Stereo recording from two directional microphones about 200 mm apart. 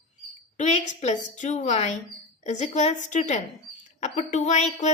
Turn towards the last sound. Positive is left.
turn(degrees=35)  # may be behind; listen again after turning